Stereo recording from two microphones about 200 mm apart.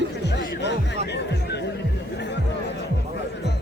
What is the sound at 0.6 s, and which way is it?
Music, 60° left (ahead or behind).